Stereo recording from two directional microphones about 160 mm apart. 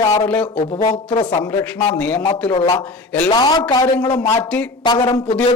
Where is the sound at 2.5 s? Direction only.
25° left (ahead or behind).